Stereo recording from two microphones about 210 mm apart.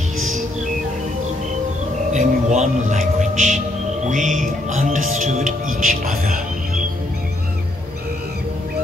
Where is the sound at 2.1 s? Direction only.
30° right (ahead or behind).